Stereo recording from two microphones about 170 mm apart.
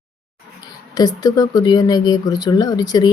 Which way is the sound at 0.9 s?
20° left (ahead or behind).